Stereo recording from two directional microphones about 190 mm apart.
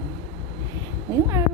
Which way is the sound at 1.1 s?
15° right (ahead or behind).